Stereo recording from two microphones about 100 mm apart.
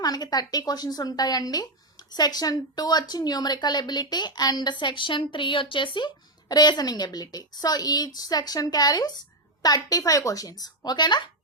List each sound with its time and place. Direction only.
0.0 s speech: 40° left (ahead or behind)
6.5 s a woman's voice: 40° left (ahead or behind)